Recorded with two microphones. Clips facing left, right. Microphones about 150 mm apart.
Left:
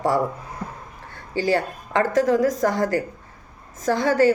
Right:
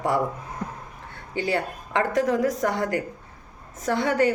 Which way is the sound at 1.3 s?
35° left (ahead or behind).